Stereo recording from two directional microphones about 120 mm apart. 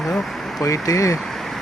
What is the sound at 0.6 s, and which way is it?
Speech, 30° left (ahead or behind).